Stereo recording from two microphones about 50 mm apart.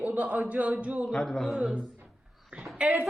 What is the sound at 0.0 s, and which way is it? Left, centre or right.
A man's voice, right.